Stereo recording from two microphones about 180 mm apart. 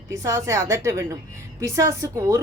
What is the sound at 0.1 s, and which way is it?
A woman's voice, 15° right (ahead or behind).